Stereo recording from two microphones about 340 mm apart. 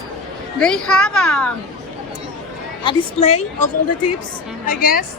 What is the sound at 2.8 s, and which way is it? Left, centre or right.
Speech, centre.